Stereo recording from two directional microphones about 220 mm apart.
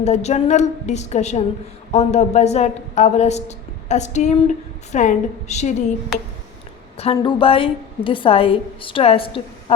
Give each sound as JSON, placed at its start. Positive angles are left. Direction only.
{"t": 0.0, "sound": "a woman's voice", "side_deg": 30}
{"t": 6.9, "sound": "a woman's voice", "side_deg": 25}